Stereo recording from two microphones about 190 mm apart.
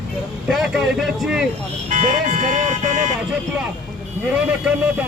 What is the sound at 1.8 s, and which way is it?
Speech, 45° right (ahead or behind).